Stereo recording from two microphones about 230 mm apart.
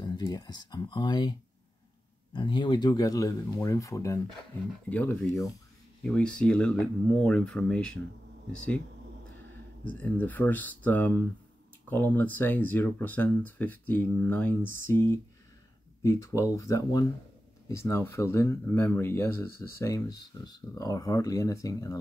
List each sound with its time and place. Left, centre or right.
0.0 s speech: centre
2.3 s speech: centre
9.8 s speech: centre